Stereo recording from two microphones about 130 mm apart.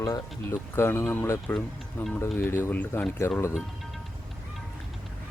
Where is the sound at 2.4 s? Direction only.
15° left (ahead or behind).